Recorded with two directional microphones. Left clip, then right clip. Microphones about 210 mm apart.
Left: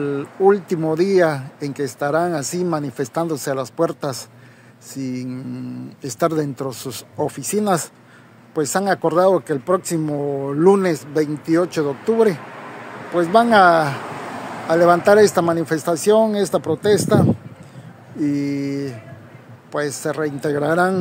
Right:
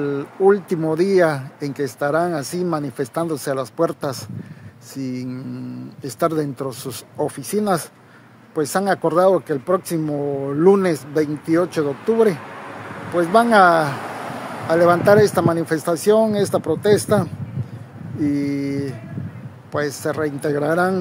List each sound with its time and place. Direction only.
0.0 s speech: 10° left (ahead or behind)
12.5 s a sound: 55° right (ahead or behind)
13.1 s speech: 5° left (ahead or behind)